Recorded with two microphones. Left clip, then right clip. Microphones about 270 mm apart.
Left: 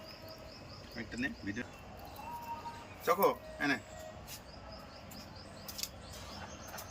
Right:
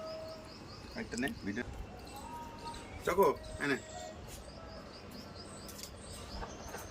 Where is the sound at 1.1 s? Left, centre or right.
Centre.